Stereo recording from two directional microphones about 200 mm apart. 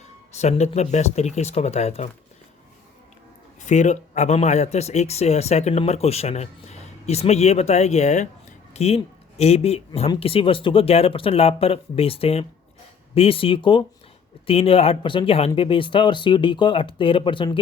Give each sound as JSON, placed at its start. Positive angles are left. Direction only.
{"t": 0.3, "sound": "speech", "side_deg": 35}
{"t": 3.6, "sound": "speech", "side_deg": 35}